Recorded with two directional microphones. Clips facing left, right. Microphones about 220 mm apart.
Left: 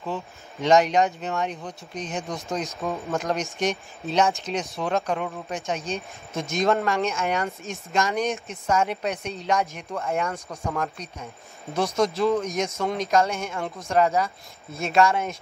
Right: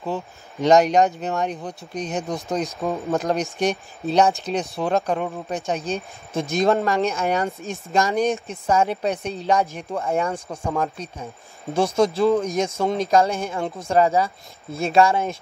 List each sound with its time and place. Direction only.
0.0 s speech: 35° right (ahead or behind)